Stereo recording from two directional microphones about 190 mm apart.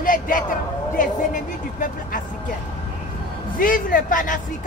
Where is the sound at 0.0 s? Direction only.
45° left (ahead or behind).